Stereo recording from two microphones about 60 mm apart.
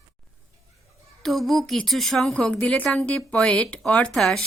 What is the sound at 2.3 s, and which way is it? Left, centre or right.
Speech, centre.